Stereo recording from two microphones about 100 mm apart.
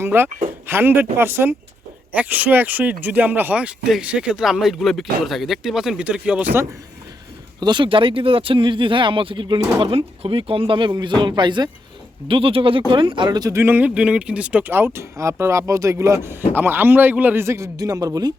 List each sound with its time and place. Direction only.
0.0 s a man's voice: 25° right (ahead or behind)
7.6 s speech: 50° right (ahead or behind)
12.3 s speech: 65° right (ahead or behind); by 13.5 s 45° right (ahead or behind)
13.5 s a man's voice: 20° right (ahead or behind); by 18.3 s 40° right (ahead or behind)